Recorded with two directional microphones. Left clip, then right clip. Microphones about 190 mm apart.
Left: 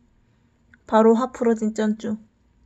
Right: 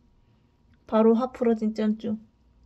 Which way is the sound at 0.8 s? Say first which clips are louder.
Left 5 dB; 5° left (ahead or behind).